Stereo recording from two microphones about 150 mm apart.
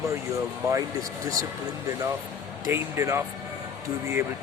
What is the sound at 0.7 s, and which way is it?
Speech, 20° right (ahead or behind).